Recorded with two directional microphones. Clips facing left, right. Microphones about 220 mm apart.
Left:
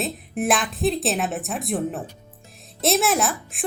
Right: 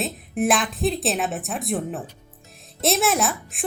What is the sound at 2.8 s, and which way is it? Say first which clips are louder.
Speech: left 1 dB; centre (ahead or behind).